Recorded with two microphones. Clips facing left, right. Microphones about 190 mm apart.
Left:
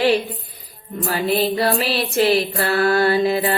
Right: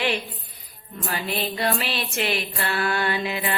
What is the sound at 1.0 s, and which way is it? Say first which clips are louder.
Music: left 9 dB; 35° left (ahead or behind).